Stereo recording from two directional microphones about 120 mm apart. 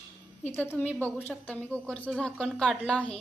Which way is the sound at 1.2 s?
15° left (ahead or behind).